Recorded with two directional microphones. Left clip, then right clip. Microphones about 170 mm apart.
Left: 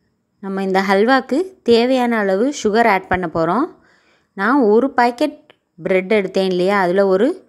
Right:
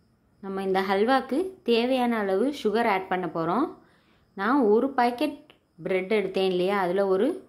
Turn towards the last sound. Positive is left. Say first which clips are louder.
# left 9 dB
turn(degrees=40)  # may be behind; listen again after turning